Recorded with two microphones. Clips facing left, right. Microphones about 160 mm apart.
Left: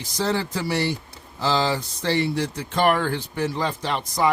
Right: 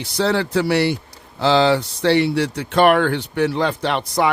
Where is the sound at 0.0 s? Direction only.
70° right (ahead or behind).